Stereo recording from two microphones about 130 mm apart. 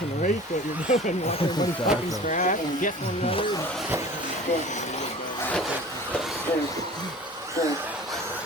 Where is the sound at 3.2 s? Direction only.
40° left (ahead or behind).